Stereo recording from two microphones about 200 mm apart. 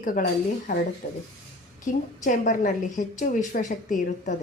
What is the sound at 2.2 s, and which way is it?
A woman's voice, 40° left (ahead or behind).